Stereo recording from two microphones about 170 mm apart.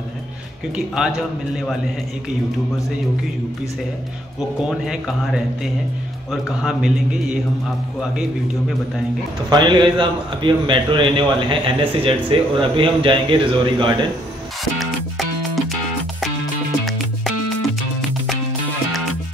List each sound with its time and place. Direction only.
0.9 s a man's voice: 5° right (ahead or behind)
4.6 s a man's voice: centre (ahead or behind)
9.5 s a man's voice: 25° right (ahead or behind)
14.6 s music: centre (ahead or behind)
16.8 s music: centre (ahead or behind)